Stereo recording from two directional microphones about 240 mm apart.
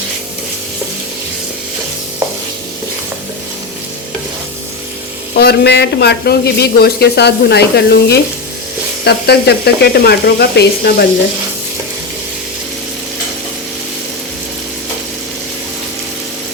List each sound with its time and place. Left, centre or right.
5.3 s speech: left